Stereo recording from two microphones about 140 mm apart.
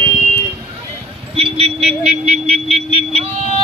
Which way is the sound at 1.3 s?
45° right (ahead or behind).